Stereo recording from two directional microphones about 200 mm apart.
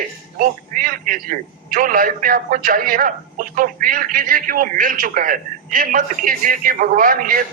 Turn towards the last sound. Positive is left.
turn(degrees=-45)  # may be behind; listen again after turning